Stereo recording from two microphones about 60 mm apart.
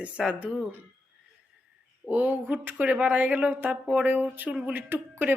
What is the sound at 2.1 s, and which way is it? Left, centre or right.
Speech, right.